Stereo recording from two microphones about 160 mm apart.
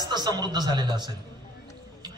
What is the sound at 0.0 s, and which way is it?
Speech, 25° right (ahead or behind).